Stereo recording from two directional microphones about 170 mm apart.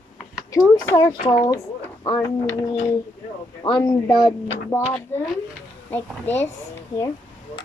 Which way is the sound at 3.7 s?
10° left (ahead or behind).